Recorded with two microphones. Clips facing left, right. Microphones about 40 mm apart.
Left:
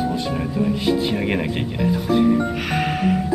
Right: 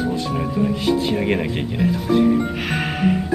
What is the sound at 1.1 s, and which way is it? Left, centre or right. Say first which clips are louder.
Speech: right 1 dB; centre.